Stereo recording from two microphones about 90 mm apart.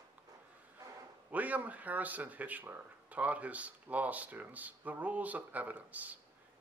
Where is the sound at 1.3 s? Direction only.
15° right (ahead or behind).